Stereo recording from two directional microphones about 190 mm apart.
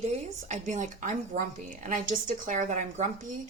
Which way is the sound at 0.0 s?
40° right (ahead or behind).